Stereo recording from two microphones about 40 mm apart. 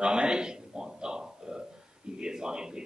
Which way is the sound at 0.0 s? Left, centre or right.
Right.